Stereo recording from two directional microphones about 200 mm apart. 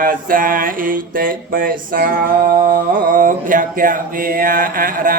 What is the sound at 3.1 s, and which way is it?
Mantra, 40° right (ahead or behind).